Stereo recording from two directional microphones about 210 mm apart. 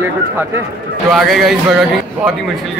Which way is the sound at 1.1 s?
Centre (ahead or behind).